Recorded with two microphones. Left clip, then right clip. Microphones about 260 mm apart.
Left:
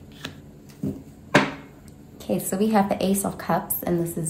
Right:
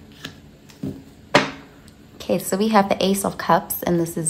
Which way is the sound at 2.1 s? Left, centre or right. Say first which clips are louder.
Right 4 dB; right.